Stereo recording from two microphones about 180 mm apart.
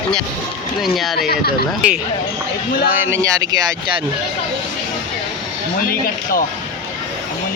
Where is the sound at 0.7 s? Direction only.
Centre (ahead or behind).